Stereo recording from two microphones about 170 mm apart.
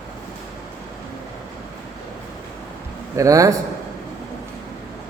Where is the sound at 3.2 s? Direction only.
20° right (ahead or behind).